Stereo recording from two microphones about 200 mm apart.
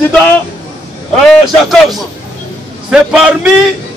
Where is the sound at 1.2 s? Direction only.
Centre (ahead or behind).